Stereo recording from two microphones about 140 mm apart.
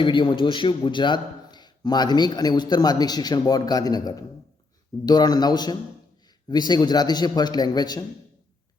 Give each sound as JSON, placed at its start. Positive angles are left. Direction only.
{"t": 0.0, "sound": "a man's voice", "side_deg": 35}